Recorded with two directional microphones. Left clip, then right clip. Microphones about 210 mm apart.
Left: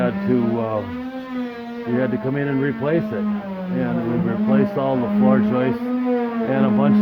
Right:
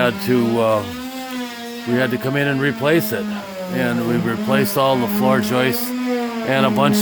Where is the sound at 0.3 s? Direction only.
60° right (ahead or behind).